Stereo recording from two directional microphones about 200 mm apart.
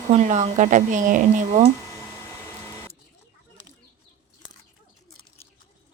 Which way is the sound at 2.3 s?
10° left (ahead or behind).